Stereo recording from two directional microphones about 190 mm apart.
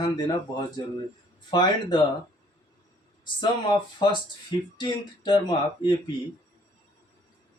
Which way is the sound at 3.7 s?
25° left (ahead or behind).